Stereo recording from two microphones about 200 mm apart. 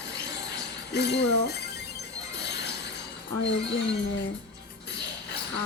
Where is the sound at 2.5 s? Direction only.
55° left (ahead or behind).